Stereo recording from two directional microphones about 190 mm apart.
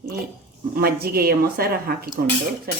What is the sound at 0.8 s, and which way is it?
Speech, 55° right (ahead or behind).